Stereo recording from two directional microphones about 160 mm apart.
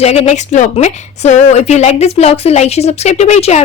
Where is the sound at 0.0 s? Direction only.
40° left (ahead or behind).